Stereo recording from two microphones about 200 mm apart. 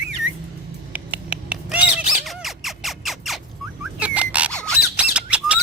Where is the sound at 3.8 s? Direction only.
5° right (ahead or behind).